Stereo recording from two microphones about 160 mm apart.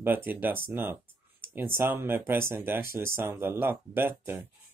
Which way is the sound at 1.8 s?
15° right (ahead or behind).